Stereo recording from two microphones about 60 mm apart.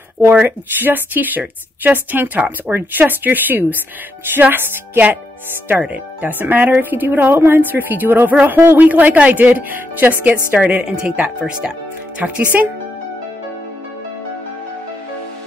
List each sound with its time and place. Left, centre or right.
0.3 s speech: right
8.8 s speech: right